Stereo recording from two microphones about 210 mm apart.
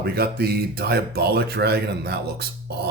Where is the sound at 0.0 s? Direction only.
50° right (ahead or behind).